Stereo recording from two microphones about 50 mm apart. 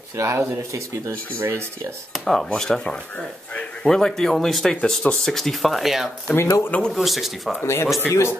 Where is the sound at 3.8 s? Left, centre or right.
Centre.